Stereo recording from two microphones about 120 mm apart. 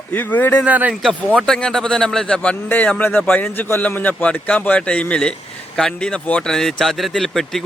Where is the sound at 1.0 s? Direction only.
5° left (ahead or behind).